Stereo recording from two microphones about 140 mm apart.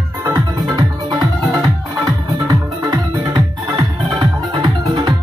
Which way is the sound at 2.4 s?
25° right (ahead or behind).